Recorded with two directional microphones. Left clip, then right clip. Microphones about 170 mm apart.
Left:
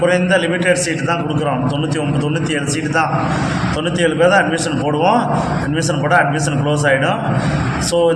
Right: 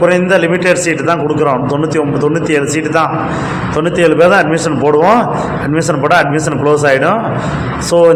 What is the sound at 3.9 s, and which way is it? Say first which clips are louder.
Speech: right 5 dB; 30° right (ahead or behind).